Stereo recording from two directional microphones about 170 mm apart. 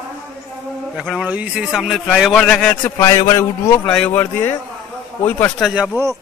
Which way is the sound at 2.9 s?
15° left (ahead or behind).